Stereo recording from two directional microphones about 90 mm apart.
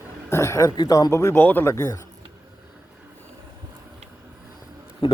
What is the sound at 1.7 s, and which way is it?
Speech, 35° left (ahead or behind).